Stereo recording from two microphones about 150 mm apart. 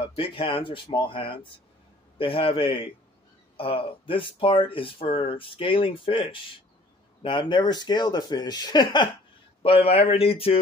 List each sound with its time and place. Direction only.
0.1 s speech: 35° left (ahead or behind)